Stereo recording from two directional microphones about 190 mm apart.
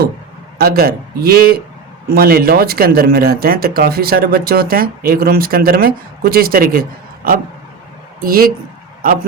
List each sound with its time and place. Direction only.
0.6 s speech: 55° right (ahead or behind)
8.2 s speech: 50° right (ahead or behind)